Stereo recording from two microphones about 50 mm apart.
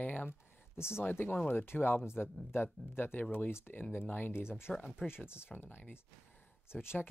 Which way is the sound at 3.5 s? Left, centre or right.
Left.